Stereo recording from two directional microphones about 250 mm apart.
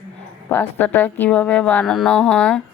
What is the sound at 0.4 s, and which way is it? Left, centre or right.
Speech, centre.